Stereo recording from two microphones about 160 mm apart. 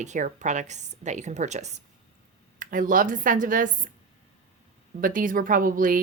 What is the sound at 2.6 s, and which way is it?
Speech, 55° right (ahead or behind).